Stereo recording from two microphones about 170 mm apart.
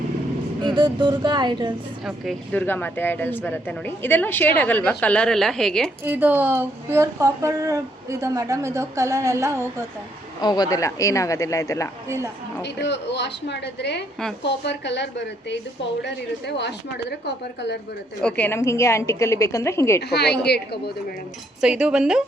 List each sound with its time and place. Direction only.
0.6 s speech: 25° right (ahead or behind)
2.0 s speech: 5° left (ahead or behind)
6.1 s speech: 10° right (ahead or behind)
10.4 s speech: 25° left (ahead or behind)
12.0 s speech: 15° right (ahead or behind)
12.6 s a woman's voice: 90° left
18.2 s speech: 5° left (ahead or behind)
20.0 s speech: 75° left (ahead or behind)
21.6 s speech: 5° right (ahead or behind)